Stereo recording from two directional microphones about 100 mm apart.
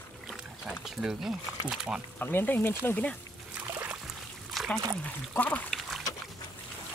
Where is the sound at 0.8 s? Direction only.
5° right (ahead or behind).